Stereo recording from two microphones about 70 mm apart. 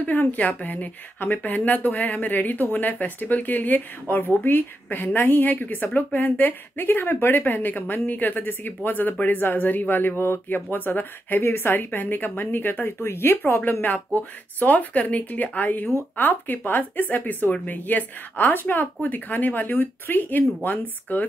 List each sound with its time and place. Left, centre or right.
0.0 s speech: left